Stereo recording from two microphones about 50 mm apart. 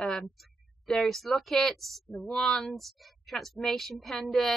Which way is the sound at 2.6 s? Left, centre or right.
Centre.